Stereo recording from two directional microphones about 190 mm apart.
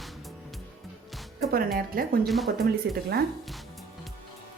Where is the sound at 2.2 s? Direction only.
Centre (ahead or behind).